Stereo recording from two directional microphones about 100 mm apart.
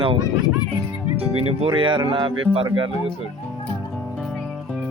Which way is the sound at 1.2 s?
60° right (ahead or behind).